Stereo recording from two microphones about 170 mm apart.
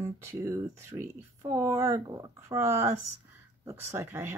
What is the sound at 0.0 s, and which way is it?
Speech, 15° right (ahead or behind).